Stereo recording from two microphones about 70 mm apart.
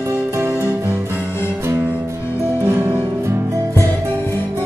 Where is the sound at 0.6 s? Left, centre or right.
Right.